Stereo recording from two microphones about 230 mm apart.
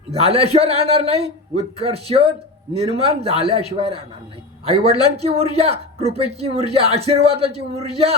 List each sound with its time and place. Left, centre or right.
0.1 s speech: right